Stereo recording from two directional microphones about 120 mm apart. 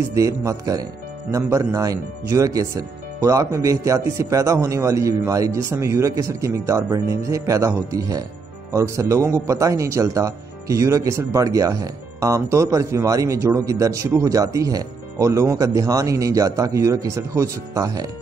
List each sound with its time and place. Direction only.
0.1 s speech: 25° right (ahead or behind)